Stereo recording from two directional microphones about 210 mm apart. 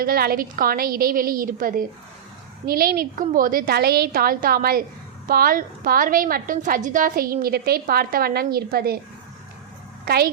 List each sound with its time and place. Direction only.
0.0 s a woman's voice: 45° right (ahead or behind)